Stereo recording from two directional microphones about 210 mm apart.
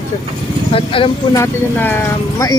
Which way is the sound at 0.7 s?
25° left (ahead or behind).